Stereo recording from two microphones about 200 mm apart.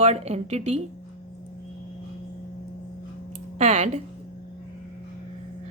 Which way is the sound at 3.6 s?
35° right (ahead or behind).